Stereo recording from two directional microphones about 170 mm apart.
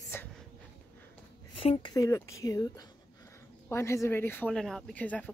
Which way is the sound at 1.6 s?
25° left (ahead or behind).